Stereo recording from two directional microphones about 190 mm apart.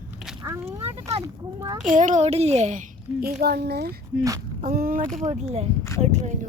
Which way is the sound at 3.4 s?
55° right (ahead or behind).